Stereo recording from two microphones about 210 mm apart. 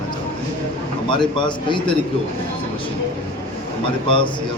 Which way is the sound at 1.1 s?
20° left (ahead or behind).